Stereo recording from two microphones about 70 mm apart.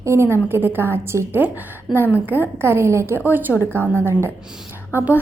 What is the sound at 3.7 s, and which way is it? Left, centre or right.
Speech, left.